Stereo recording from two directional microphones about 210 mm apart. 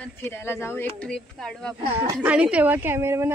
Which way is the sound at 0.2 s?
10° left (ahead or behind).